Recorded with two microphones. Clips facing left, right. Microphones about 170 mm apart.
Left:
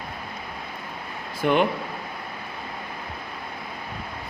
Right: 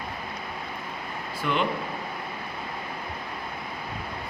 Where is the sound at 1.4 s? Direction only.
55° left (ahead or behind).